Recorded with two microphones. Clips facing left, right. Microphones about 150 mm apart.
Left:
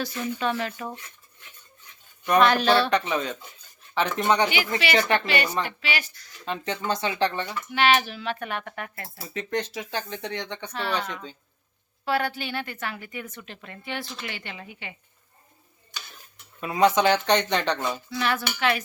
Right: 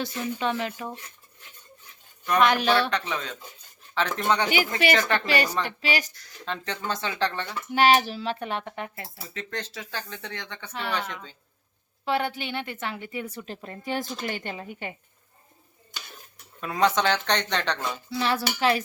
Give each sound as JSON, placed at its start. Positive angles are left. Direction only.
{"t": 0.0, "sound": "a woman's voice", "side_deg": -25}
{"t": 2.4, "sound": "speech", "side_deg": -15}
{"t": 2.9, "sound": "speech", "side_deg": 15}
{"t": 5.2, "sound": "a woman's voice", "side_deg": -35}
{"t": 6.4, "sound": "speech", "side_deg": 15}
{"t": 7.7, "sound": "a woman's voice", "side_deg": -40}
{"t": 9.3, "sound": "speech", "side_deg": 15}
{"t": 10.7, "sound": "speech", "side_deg": -15}
{"t": 11.1, "sound": "speech", "side_deg": 15}
{"t": 12.0, "sound": "a woman's voice", "side_deg": -20}
{"t": 16.6, "sound": "speech", "side_deg": 10}
{"t": 18.1, "sound": "a woman's voice", "side_deg": -30}